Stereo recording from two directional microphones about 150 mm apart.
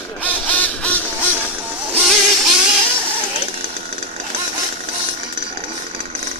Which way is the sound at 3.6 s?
45° right (ahead or behind).